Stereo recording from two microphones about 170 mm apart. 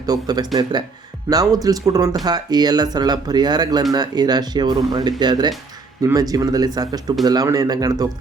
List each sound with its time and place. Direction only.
0.0 s speech: 20° right (ahead or behind)